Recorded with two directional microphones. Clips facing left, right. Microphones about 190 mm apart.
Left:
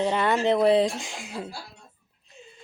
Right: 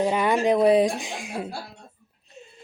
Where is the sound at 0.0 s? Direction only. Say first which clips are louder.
Right 2 dB; 10° right (ahead or behind).